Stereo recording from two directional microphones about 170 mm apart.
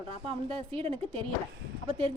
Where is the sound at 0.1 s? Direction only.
35° right (ahead or behind).